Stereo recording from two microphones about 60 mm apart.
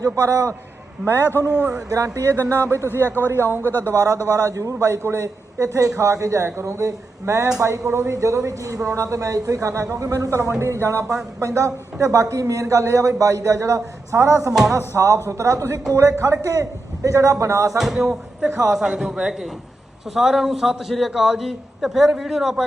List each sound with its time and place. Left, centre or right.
0.0 s a man's voice: right
1.0 s a man's voice: left
1.5 s a man's voice: centre
2.1 s a woman's voice: right
3.0 s a man's voice: left
3.2 s a man's voice: right
3.6 s a man's voice: left
3.9 s a woman's voice: right
10.6 s a woman's voice: right
16.2 s a woman's voice: right
17.7 s a man's voice: centre